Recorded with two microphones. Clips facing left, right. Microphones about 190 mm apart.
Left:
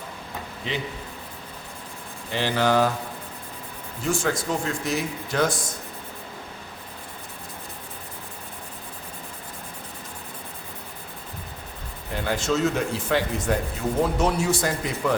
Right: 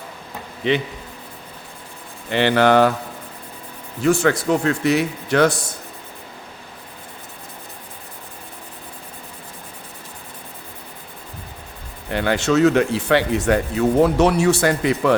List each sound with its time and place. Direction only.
0.6 s speech: 70° right (ahead or behind)
2.3 s speech: 70° right (ahead or behind)
4.0 s speech: 65° right (ahead or behind)
12.1 s speech: 75° right (ahead or behind)